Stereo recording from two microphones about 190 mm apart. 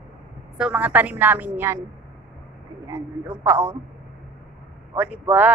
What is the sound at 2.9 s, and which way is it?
Speech, 15° right (ahead or behind).